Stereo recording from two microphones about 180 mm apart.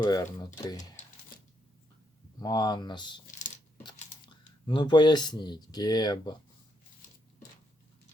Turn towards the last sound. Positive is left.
turn(degrees=25)  # may be behind; listen again after turning